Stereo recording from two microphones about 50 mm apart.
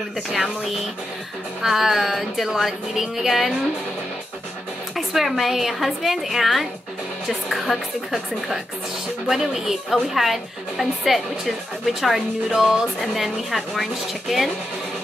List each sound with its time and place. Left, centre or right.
1.6 s a woman's voice: centre
4.9 s a woman's voice: centre
9.3 s a woman's voice: centre